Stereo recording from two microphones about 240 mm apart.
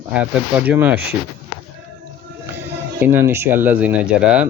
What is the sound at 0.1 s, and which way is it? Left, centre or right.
Speech, centre.